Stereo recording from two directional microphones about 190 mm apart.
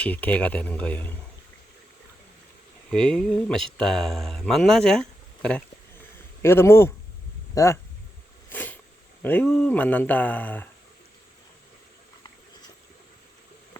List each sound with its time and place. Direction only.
0.0 s speech: 10° left (ahead or behind)
2.9 s speech: 5° left (ahead or behind)
8.5 s a sound: 10° left (ahead or behind)
9.2 s speech: 5° left (ahead or behind)